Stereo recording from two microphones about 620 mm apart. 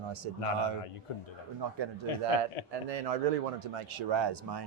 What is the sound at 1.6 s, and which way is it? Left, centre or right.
Speech, right.